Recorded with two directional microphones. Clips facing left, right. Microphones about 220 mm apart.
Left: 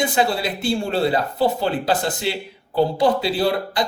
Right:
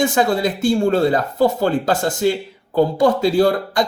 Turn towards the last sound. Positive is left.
turn(degrees=-50)  # may be behind; listen again after turning